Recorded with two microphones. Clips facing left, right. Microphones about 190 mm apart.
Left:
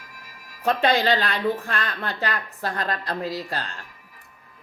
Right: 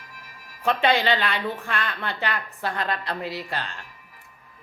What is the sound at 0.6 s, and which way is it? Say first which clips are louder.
A woman's voice: left 1 dB; 40° left (ahead or behind).